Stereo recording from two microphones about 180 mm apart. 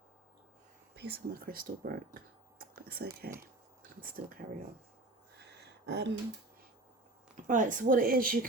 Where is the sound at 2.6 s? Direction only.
60° right (ahead or behind).